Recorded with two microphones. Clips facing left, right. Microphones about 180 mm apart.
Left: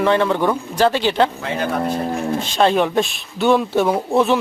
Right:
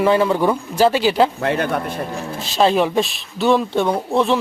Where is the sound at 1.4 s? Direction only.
60° right (ahead or behind).